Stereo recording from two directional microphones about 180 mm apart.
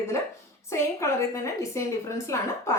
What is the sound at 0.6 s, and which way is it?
Speech, 15° left (ahead or behind).